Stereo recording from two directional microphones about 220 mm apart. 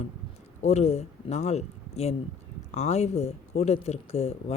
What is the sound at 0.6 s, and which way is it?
Speech, 30° left (ahead or behind).